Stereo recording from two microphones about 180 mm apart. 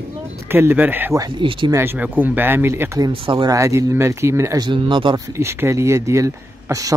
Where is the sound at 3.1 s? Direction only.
30° right (ahead or behind).